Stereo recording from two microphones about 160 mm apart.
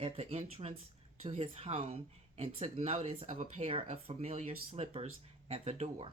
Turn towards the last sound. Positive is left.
turn(degrees=-40)  # may be behind; listen again after turning